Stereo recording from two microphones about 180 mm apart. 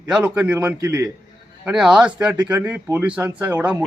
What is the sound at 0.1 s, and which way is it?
A man's voice, 5° right (ahead or behind).